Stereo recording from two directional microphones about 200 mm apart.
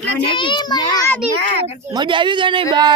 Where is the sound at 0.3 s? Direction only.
25° left (ahead or behind).